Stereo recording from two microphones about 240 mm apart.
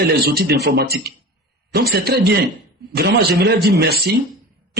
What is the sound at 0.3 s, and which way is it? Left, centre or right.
A man's voice, right.